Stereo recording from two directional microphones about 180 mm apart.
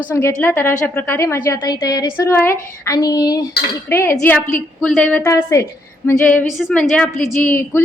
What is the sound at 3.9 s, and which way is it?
A woman's voice, 15° left (ahead or behind).